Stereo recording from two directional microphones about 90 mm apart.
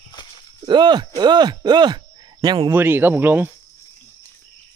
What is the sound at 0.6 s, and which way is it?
Speech, 60° right (ahead or behind).